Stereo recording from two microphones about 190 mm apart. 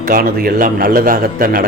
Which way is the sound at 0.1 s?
50° right (ahead or behind).